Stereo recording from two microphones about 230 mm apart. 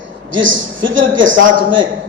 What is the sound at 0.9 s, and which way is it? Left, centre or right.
Speech, right.